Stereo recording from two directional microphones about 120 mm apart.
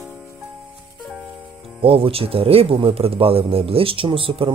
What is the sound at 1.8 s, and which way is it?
Speech, 50° right (ahead or behind).